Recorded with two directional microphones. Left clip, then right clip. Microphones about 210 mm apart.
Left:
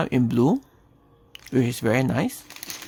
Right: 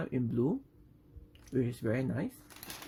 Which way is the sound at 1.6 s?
45° left (ahead or behind).